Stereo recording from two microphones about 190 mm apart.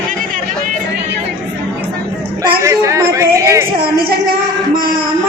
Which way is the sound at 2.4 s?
15° right (ahead or behind).